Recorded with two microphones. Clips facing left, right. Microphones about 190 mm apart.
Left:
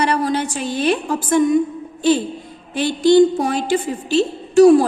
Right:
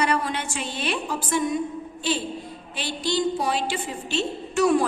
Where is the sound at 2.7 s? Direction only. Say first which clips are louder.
Left 14 dB; 50° left (ahead or behind).